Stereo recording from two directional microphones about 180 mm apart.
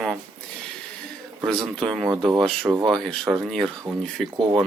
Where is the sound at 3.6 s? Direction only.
15° right (ahead or behind).